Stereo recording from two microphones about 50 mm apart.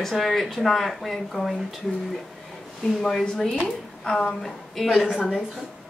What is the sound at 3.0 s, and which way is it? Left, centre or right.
Speech, centre.